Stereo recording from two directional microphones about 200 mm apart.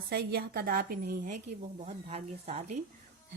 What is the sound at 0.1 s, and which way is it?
Speech, 55° right (ahead or behind).